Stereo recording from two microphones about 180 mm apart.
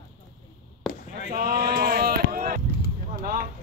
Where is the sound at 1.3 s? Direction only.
55° right (ahead or behind).